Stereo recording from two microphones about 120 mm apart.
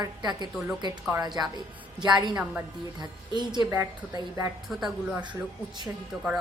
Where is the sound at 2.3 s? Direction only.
10° right (ahead or behind).